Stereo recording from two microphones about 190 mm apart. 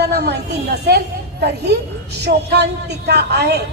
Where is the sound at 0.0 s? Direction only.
60° right (ahead or behind).